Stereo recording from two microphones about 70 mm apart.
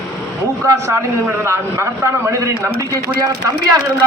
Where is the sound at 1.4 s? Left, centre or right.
Right.